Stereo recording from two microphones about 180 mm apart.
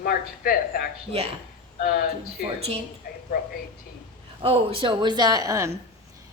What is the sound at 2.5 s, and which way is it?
Speech, 35° right (ahead or behind).